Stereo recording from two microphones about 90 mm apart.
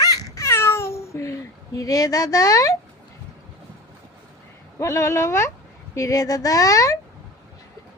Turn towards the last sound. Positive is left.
turn(degrees=40)  # may be behind; listen again after turning